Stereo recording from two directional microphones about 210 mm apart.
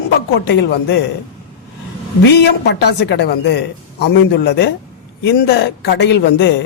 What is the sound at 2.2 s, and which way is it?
A woman's voice, 55° left (ahead or behind).